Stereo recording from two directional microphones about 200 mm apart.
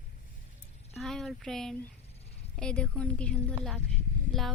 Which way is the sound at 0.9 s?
Centre (ahead or behind).